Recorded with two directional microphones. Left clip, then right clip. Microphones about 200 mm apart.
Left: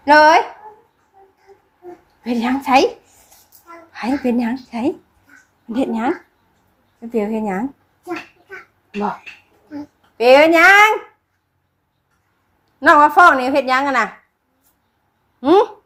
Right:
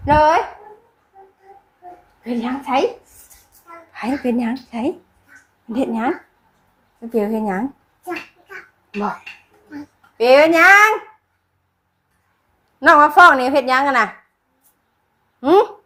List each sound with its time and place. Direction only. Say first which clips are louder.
0.0 s speech: left 4 dB; 15° left (ahead or behind)
2.2 s a woman's voice: left 4 dB; 20° left (ahead or behind)
3.9 s a woman's voice: left 1 dB; 5° left (ahead or behind)
12.8 s a woman's voice: even; centre (ahead or behind)
15.4 s a woman's voice: even; centre (ahead or behind)